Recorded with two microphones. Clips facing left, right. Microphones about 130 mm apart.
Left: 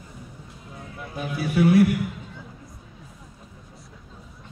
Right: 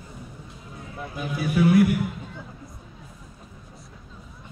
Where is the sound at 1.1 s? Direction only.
30° left (ahead or behind).